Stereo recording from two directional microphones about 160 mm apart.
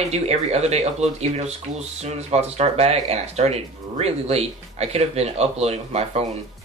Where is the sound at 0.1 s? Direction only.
40° right (ahead or behind).